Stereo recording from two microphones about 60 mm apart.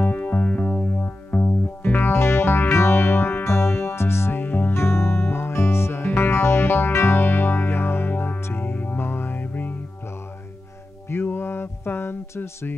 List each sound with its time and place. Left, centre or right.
0.0 s music: left
11.1 s music: left